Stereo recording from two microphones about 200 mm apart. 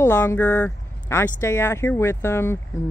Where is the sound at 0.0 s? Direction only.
15° left (ahead or behind).